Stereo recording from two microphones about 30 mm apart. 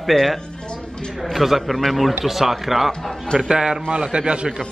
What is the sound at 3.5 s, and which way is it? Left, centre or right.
Speech, right.